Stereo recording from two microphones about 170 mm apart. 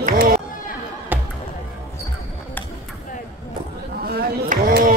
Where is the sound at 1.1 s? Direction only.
10° right (ahead or behind).